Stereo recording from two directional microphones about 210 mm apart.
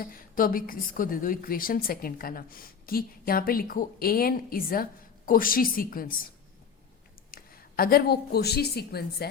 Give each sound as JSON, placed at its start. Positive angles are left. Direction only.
{"t": 0.0, "sound": "a woman's voice", "side_deg": 45}
{"t": 7.3, "sound": "speech", "side_deg": 45}